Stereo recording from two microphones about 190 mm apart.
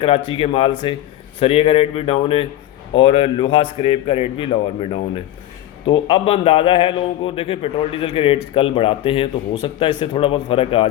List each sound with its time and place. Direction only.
0.0 s a man's voice: 30° left (ahead or behind)